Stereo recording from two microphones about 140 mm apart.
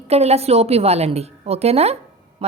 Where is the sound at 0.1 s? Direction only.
50° right (ahead or behind).